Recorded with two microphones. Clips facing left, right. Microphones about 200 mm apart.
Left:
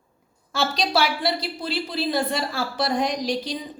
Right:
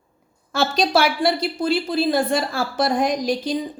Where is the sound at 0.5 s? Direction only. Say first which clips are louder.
Right 4 dB; 50° right (ahead or behind).